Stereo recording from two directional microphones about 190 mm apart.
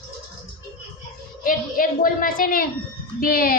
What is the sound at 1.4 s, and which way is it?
A woman's voice, 45° left (ahead or behind).